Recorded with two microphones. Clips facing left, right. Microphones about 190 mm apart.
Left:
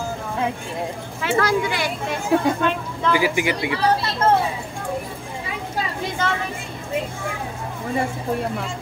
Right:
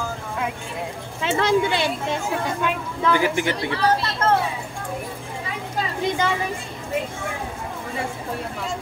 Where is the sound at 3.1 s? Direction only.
10° left (ahead or behind).